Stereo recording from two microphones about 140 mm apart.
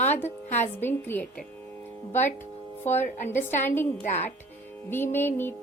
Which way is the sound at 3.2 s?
15° left (ahead or behind).